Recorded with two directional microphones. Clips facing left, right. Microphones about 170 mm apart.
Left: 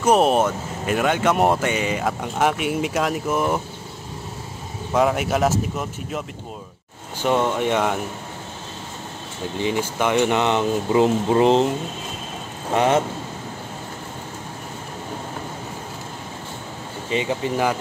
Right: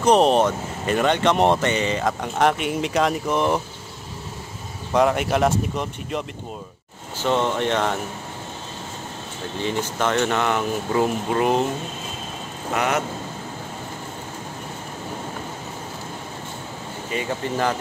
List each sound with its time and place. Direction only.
0.0 s speech: 5° left (ahead or behind)
4.9 s speech: 5° left (ahead or behind)
9.6 s speech: 15° left (ahead or behind)
12.7 s speech: 30° left (ahead or behind)
17.1 s speech: 15° left (ahead or behind)